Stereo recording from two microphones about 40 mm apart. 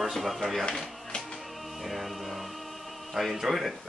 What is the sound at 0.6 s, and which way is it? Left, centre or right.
Speech, left.